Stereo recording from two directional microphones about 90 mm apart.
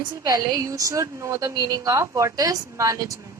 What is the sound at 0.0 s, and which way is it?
A woman's voice, 45° right (ahead or behind).